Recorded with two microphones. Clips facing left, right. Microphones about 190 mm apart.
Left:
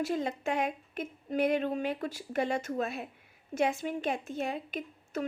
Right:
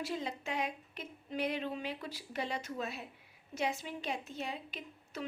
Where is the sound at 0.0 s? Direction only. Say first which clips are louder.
Left 7 dB; 50° left (ahead or behind).